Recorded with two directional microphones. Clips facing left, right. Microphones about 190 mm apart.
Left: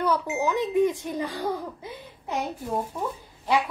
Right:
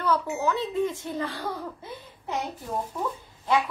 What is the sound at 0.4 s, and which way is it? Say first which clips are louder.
A woman's voice: left 3 dB; 15° left (ahead or behind).